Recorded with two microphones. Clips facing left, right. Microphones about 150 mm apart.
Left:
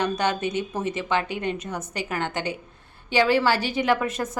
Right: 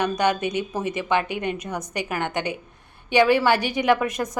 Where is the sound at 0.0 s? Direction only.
15° right (ahead or behind).